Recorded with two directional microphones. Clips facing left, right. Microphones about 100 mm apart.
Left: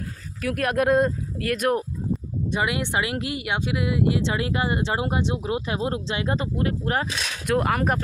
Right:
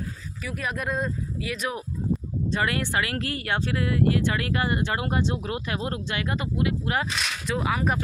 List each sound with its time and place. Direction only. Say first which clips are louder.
0.4 s speech: left 9 dB; 65° left (ahead or behind)
2.5 s speech: left 1 dB; 15° left (ahead or behind); by 7.1 s 40° left (ahead or behind)
7.4 s speech: left 4 dB; 55° left (ahead or behind)